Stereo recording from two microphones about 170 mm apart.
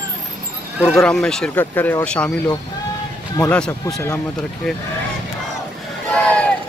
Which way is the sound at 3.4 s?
10° left (ahead or behind).